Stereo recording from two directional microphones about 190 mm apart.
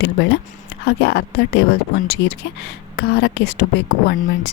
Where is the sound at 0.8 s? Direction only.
60° left (ahead or behind).